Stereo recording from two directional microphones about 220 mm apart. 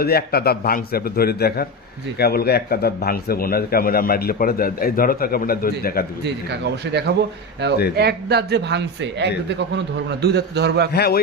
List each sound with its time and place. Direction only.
0.0 s a man's voice: 45° left (ahead or behind)
6.2 s speech: 50° right (ahead or behind)
10.9 s a man's voice: 45° left (ahead or behind)